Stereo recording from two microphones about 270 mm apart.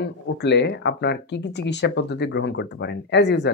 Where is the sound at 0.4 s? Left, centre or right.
Left.